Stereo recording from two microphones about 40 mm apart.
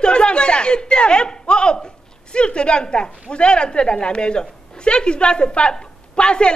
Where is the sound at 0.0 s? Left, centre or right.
Left.